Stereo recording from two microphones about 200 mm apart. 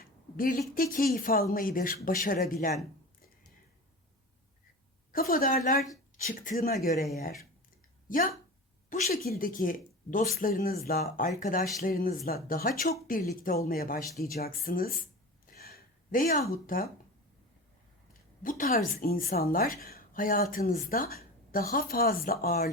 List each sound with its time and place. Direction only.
0.0 s a sound: 45° left (ahead or behind)
0.7 s a woman's voice: 45° left (ahead or behind)
5.1 s a woman's voice: 45° left (ahead or behind)
8.0 s a woman's voice: 40° left (ahead or behind)
15.5 s a sound: 50° left (ahead or behind)
16.6 s a woman's voice: 45° left (ahead or behind)
18.4 s a woman's voice: 40° left (ahead or behind)